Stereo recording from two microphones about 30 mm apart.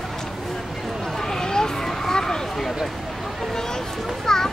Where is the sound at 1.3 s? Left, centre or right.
Left.